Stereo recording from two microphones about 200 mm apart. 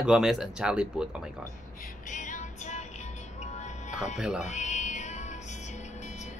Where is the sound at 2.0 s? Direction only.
40° left (ahead or behind).